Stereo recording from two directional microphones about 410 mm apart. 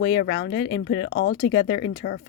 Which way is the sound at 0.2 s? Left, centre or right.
Left.